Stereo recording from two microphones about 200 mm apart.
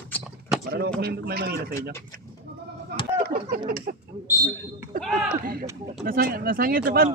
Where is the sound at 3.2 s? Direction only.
50° right (ahead or behind).